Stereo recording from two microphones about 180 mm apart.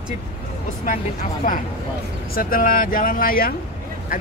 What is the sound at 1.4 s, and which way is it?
Speech, 50° left (ahead or behind).